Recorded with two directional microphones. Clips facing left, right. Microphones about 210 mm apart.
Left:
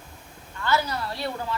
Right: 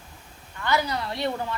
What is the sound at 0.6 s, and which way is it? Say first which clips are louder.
Speech: even; 15° right (ahead or behind).